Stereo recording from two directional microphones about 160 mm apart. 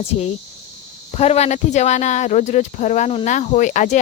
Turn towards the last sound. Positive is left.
turn(degrees=50)  # may be behind; listen again after turning